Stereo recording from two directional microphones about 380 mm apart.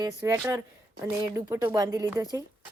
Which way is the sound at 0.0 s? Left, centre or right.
Centre.